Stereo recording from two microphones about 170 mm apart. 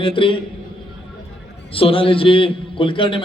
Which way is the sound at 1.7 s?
35° left (ahead or behind).